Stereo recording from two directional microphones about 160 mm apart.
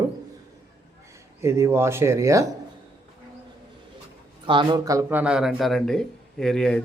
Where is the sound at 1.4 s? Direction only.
15° right (ahead or behind).